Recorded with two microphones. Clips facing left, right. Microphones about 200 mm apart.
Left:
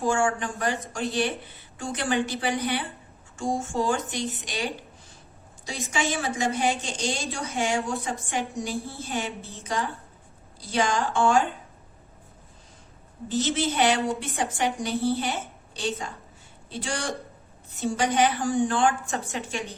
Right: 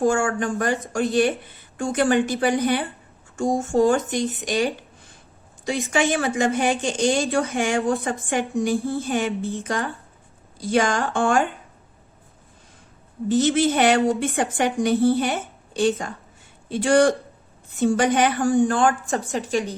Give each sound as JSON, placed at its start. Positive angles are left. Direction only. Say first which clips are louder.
{"t": 0.0, "sound": "a woman's voice", "louder": "right 4 dB", "side_deg": -45}
{"t": 5.6, "sound": "a woman's voice", "louder": "right 7 dB", "side_deg": -55}
{"t": 13.2, "sound": "a woman's voice", "louder": "right 7 dB", "side_deg": -50}